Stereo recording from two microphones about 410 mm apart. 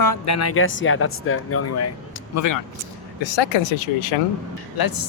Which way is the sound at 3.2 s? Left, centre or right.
Left.